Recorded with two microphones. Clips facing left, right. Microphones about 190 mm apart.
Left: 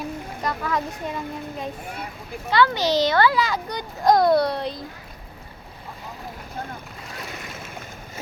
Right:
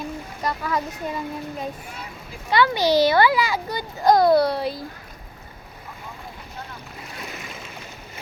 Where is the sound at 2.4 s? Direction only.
15° right (ahead or behind).